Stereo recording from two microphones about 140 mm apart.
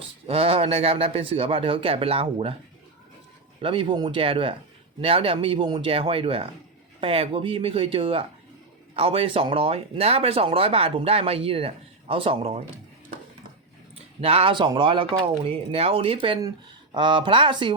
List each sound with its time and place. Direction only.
0.3 s speech: 45° right (ahead or behind)
3.6 s speech: 40° right (ahead or behind)
14.2 s speech: 45° right (ahead or behind)